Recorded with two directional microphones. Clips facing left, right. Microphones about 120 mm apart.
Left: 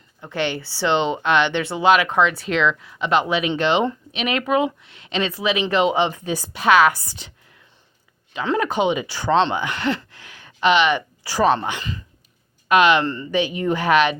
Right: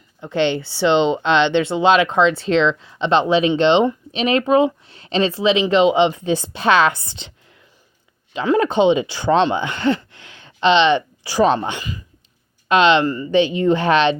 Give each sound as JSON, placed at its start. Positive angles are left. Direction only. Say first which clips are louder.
{"t": 0.2, "sound": "speech", "louder": "right 6 dB", "side_deg": -20}
{"t": 8.5, "sound": "speech", "louder": "right 6 dB", "side_deg": -25}